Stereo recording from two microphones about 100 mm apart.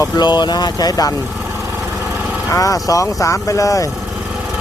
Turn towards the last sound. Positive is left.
turn(degrees=35)  # may be behind; listen again after turning